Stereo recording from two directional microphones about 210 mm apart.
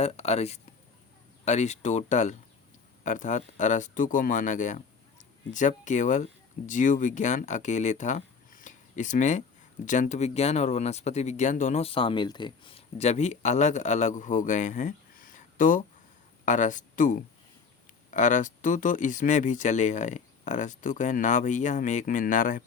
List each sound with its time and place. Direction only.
0.0 s speech: 30° left (ahead or behind)